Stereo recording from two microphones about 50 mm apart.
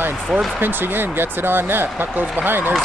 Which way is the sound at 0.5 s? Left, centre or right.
Right.